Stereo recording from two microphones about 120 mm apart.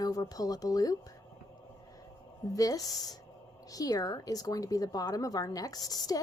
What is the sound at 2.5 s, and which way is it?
Speech, 30° left (ahead or behind).